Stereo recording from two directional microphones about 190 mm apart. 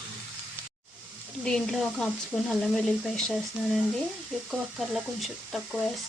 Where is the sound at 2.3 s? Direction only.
Centre (ahead or behind).